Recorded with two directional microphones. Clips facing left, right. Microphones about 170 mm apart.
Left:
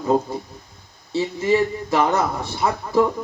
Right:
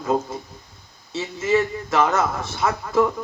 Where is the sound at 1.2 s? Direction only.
30° left (ahead or behind).